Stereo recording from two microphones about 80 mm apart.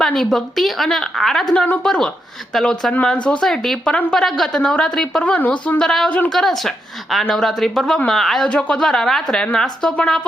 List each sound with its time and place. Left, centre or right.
0.0 s a woman's voice: centre
2.9 s a woman's voice: centre
6.6 s speech: centre
8.4 s a woman's voice: centre